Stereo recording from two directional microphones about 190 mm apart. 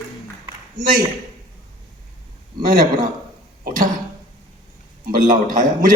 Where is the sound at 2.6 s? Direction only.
45° right (ahead or behind).